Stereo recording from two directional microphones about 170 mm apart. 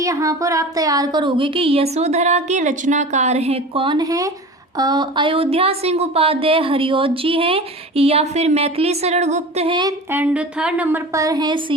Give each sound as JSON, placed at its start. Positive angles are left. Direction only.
{"t": 0.0, "sound": "a woman's voice", "side_deg": -20}
{"t": 10.1, "sound": "a woman's voice", "side_deg": -10}